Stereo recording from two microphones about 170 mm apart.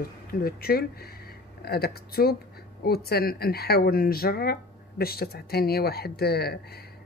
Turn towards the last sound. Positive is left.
turn(degrees=70)  # may be behind; listen again after turning